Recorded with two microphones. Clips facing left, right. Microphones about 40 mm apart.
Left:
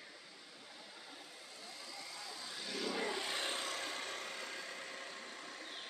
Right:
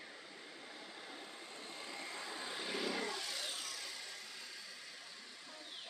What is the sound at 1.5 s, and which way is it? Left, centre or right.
Vehicle, right.